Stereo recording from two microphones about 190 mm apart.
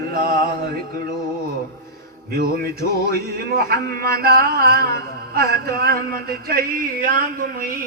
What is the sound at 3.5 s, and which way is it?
Speech, 55° right (ahead or behind).